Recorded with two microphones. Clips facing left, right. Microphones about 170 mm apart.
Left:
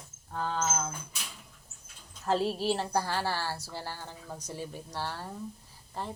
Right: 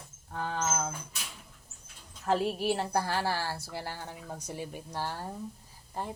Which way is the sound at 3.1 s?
55° right (ahead or behind).